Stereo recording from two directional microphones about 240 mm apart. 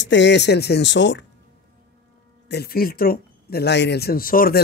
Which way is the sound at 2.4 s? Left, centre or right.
Left.